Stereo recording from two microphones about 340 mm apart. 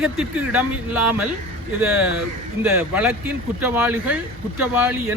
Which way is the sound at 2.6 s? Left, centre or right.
Centre.